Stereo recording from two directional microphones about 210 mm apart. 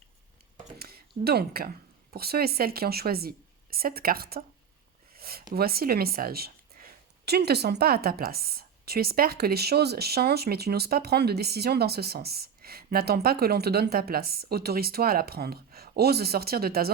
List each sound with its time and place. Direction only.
0.8 s speech: 45° right (ahead or behind)
5.1 s a sound: 45° right (ahead or behind)
5.5 s a woman's voice: 45° right (ahead or behind)